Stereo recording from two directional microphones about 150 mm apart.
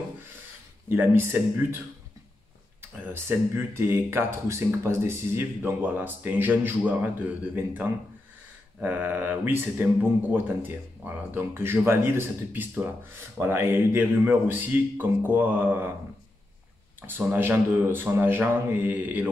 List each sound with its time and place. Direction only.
0.8 s a man's voice: 15° right (ahead or behind)
3.1 s a man's voice: 15° right (ahead or behind)
17.0 s a man's voice: 15° right (ahead or behind)